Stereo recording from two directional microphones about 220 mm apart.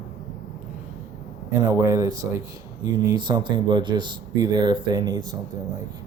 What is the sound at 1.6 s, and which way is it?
Speech, 15° right (ahead or behind).